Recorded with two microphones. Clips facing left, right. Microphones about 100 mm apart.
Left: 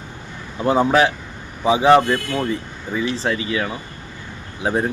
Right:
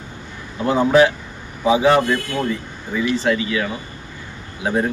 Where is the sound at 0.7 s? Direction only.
30° left (ahead or behind).